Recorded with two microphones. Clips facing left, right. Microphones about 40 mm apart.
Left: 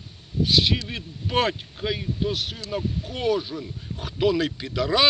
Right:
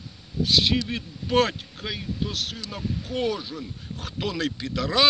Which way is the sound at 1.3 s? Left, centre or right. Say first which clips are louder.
Right 1 dB; centre.